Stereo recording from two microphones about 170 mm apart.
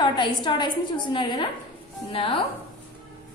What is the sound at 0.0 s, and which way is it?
A woman's voice, 25° left (ahead or behind).